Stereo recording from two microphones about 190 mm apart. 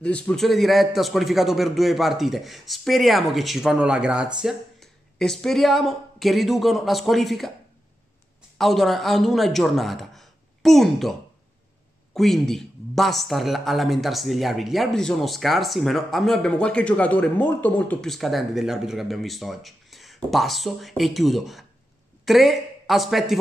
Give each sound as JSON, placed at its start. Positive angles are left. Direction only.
{"t": 0.0, "sound": "speech", "side_deg": 5}
{"t": 8.5, "sound": "speech", "side_deg": 0}